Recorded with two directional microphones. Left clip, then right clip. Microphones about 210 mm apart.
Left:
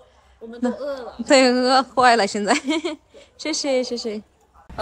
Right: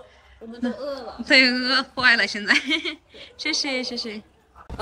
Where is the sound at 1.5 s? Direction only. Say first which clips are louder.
Left 5 dB; 30° left (ahead or behind).